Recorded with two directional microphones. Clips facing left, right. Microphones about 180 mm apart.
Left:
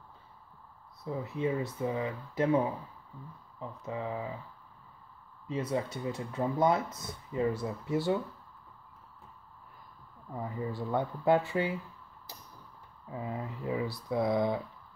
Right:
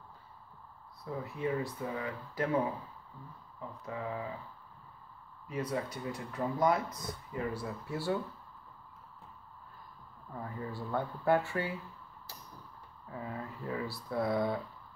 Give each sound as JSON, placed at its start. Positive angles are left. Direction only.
{"t": 1.0, "sound": "speech", "side_deg": 20}
{"t": 5.5, "sound": "speech", "side_deg": 25}
{"t": 10.3, "sound": "speech", "side_deg": 15}
{"t": 13.1, "sound": "speech", "side_deg": 20}